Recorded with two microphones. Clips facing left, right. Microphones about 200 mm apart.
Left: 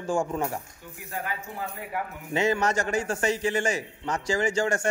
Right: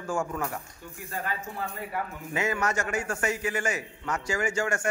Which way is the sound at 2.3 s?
30° left (ahead or behind).